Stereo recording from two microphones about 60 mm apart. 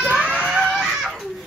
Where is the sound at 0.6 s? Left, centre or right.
Centre.